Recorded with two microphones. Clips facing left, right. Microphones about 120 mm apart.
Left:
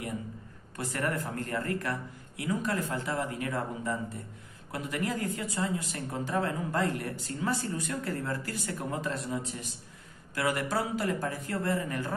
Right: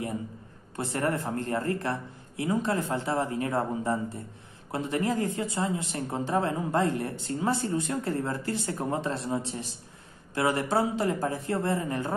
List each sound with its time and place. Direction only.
0.7 s a woman's voice: 30° right (ahead or behind)